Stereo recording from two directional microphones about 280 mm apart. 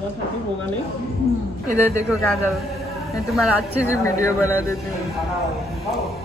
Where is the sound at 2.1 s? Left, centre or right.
Centre.